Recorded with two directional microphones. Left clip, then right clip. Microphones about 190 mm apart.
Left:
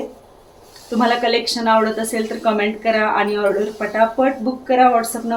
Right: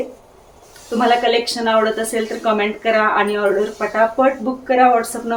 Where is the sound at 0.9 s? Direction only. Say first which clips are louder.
Right 2 dB; 5° right (ahead or behind).